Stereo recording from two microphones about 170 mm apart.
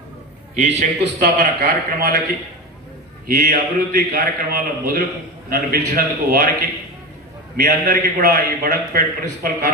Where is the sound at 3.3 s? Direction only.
60° right (ahead or behind).